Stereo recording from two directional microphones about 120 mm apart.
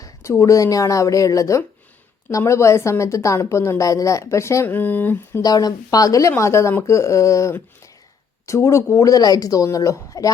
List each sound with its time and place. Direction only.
0.0 s a woman's voice: 25° left (ahead or behind)
5.4 s a woman's voice: 35° left (ahead or behind)